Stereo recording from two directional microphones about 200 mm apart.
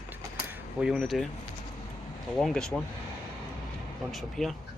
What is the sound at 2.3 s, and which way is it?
Speech, centre (ahead or behind).